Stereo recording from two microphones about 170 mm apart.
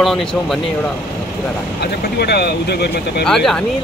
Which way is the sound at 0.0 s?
5° left (ahead or behind).